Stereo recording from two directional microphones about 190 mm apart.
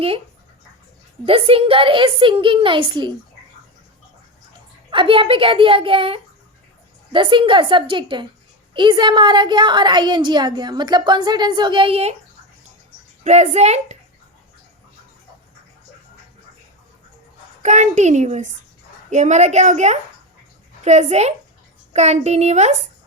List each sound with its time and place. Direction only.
1.2 s a woman's voice: 30° right (ahead or behind)
4.9 s a woman's voice: 25° right (ahead or behind)
13.2 s a woman's voice: 35° right (ahead or behind)
17.6 s a woman's voice: 40° right (ahead or behind)